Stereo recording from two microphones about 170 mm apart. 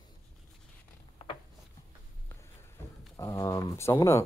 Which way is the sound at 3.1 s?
20° left (ahead or behind).